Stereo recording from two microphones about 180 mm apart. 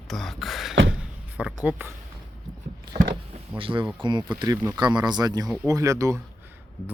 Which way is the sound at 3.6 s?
30° right (ahead or behind).